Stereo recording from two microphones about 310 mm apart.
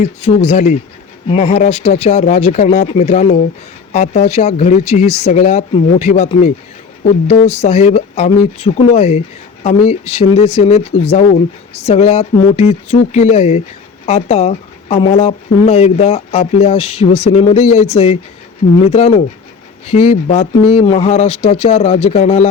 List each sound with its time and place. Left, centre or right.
0.0 s speech: left